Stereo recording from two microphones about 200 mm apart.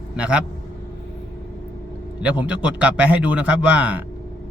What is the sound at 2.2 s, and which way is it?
A man's voice, 5° right (ahead or behind).